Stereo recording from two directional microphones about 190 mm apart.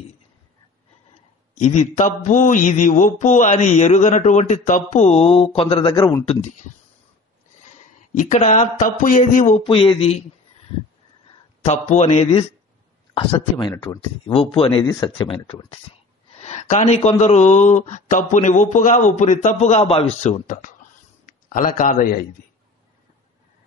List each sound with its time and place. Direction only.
1.5 s mantra: 40° left (ahead or behind); by 6.3 s 20° left (ahead or behind)
8.1 s mantra: 40° left (ahead or behind)
9.6 s speech: 25° left (ahead or behind)
11.6 s mantra: 35° left (ahead or behind)
13.1 s speech: 25° left (ahead or behind)
16.3 s mantra: 35° left (ahead or behind)
21.5 s a man's voice: 45° left (ahead or behind)